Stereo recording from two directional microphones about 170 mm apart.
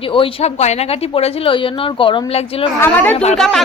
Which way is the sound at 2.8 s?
10° left (ahead or behind).